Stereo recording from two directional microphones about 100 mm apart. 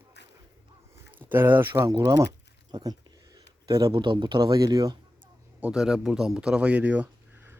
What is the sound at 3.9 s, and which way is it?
Speech, 50° right (ahead or behind).